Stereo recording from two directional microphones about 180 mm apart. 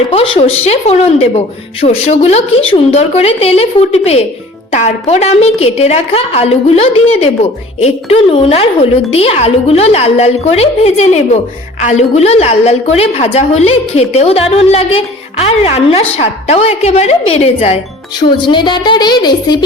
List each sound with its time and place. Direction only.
0.1 s a woman's voice: 30° left (ahead or behind)